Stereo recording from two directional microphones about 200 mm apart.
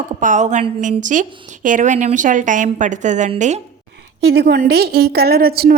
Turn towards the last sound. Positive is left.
turn(degrees=-50)  # may be behind; listen again after turning